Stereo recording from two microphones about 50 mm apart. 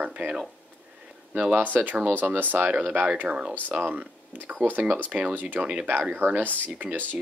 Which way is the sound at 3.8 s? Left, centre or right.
Right.